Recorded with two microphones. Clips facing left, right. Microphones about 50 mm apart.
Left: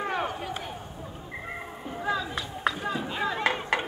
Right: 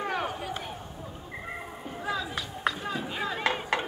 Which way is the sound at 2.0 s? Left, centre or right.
Centre.